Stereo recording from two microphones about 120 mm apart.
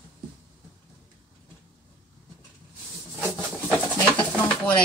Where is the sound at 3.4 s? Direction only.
5° left (ahead or behind).